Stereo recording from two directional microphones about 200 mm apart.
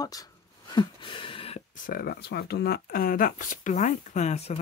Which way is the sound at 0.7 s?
25° left (ahead or behind).